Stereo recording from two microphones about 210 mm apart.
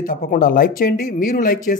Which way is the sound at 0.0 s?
40° left (ahead or behind).